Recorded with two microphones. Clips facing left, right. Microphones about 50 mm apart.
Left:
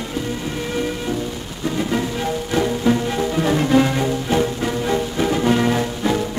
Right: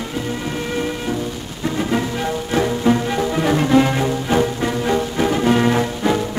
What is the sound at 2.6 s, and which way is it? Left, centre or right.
Music, centre.